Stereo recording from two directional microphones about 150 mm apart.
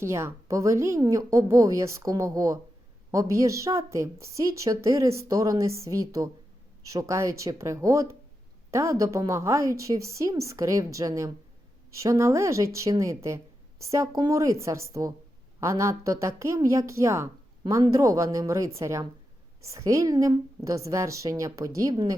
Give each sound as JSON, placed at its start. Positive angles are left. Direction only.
{"t": 0.0, "sound": "a woman's voice", "side_deg": -15}